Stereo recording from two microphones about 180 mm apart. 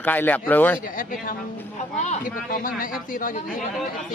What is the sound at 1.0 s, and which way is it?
A woman's voice, 50° left (ahead or behind).